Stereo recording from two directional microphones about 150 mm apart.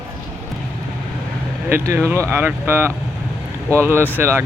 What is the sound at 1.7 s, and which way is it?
Speech, 15° right (ahead or behind).